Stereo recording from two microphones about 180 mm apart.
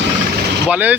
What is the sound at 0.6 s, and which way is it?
Speech, 10° right (ahead or behind).